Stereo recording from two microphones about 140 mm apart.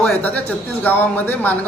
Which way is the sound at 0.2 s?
10° left (ahead or behind).